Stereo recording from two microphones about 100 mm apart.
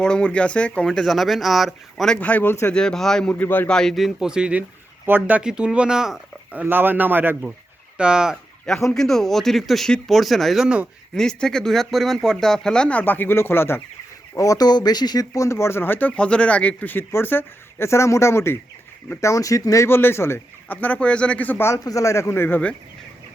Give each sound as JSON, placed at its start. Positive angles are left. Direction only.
{"t": 0.0, "sound": "speech", "side_deg": 10}
{"t": 2.1, "sound": "speech", "side_deg": 15}
{"t": 2.7, "sound": "speech", "side_deg": 5}
{"t": 3.4, "sound": "speech", "side_deg": 20}
{"t": 3.7, "sound": "speech", "side_deg": 5}
{"t": 7.9, "sound": "speech", "side_deg": -10}
{"t": 8.9, "sound": "speech", "side_deg": 5}
{"t": 11.1, "sound": "speech", "side_deg": 5}
{"t": 14.3, "sound": "speech", "side_deg": 35}
{"t": 15.4, "sound": "speech", "side_deg": 30}